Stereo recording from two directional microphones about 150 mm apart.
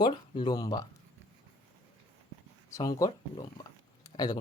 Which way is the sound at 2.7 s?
20° left (ahead or behind).